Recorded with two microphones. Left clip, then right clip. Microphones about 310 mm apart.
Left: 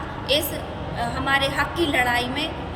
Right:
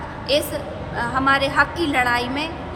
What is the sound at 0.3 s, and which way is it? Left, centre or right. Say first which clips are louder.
A woman's voice: right 2 dB; centre.